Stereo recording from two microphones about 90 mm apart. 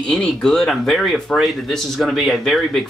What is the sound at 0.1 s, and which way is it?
Speech, 10° left (ahead or behind).